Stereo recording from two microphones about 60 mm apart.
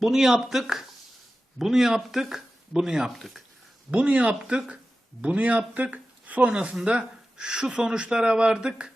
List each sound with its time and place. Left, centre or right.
0.0 s speech: centre
3.9 s speech: right